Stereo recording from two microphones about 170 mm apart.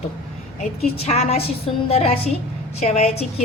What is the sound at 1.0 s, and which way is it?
A woman's voice, 40° left (ahead or behind).